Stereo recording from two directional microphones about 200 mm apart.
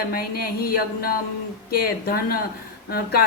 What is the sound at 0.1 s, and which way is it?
A woman's voice, 50° left (ahead or behind).